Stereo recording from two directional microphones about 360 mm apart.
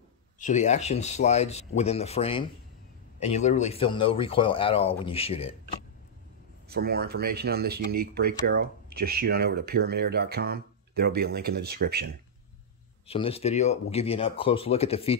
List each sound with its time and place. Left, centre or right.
0.4 s speech: centre
6.7 s speech: right
13.0 s speech: centre